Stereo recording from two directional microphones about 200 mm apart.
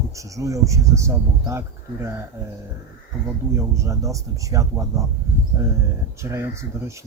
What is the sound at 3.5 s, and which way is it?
Speech, 15° right (ahead or behind).